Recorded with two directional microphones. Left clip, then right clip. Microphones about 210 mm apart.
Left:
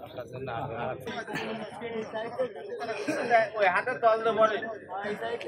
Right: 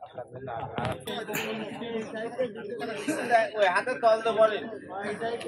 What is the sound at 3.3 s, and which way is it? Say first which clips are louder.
Speech: right 1 dB; 30° right (ahead or behind).